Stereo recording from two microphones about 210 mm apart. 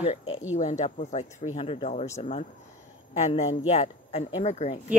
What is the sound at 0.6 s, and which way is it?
Speech, 35° left (ahead or behind).